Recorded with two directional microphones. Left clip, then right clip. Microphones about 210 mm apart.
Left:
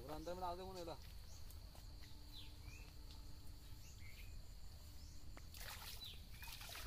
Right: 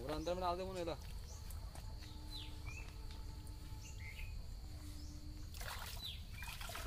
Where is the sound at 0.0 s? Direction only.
15° left (ahead or behind).